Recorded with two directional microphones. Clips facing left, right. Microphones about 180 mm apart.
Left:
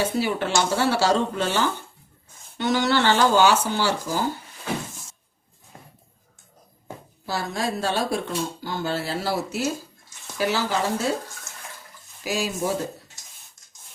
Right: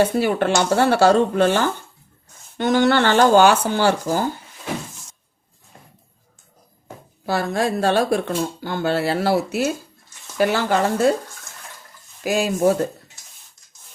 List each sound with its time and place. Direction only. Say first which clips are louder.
0.0 s speech: right 6 dB; 55° right (ahead or behind)
7.3 s speech: right 6 dB; 60° right (ahead or behind)
12.2 s speech: right 8 dB; 55° right (ahead or behind)